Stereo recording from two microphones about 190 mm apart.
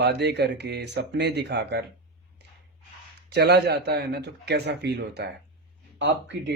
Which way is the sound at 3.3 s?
60° right (ahead or behind).